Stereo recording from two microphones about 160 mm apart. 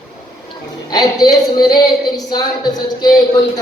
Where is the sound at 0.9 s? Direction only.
25° left (ahead or behind).